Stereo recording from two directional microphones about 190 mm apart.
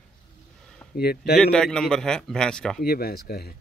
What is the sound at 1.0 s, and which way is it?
Speech, 55° left (ahead or behind).